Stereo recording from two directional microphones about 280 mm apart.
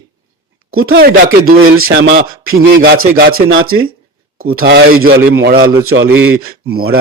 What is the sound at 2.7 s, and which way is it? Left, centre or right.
Speech, right.